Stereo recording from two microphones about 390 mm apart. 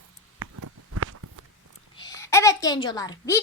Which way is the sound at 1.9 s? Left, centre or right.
Centre.